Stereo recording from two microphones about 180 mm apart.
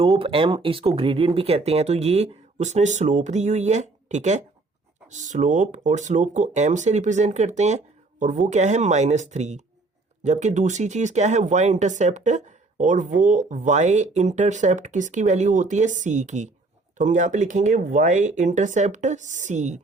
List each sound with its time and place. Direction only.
0.0 s speech: 30° right (ahead or behind)